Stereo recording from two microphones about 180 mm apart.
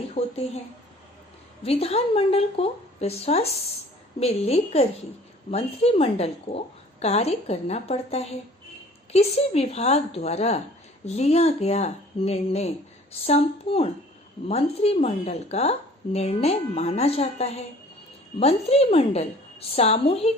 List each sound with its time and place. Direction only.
0.1 s speech: 35° left (ahead or behind)
1.6 s speech: 35° left (ahead or behind)